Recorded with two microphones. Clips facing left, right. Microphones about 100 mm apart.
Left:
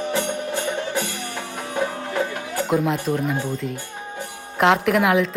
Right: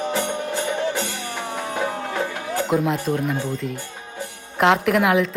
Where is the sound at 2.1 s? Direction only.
20° right (ahead or behind).